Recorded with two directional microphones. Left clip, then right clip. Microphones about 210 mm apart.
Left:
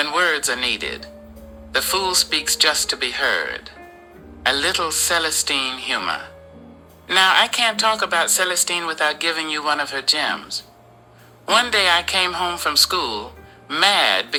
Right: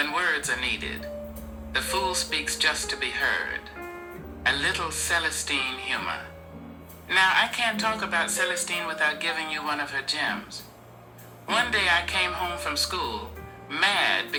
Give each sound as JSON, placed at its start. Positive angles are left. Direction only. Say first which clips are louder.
{"t": 0.0, "sound": "speech", "louder": "left 6 dB", "side_deg": 40}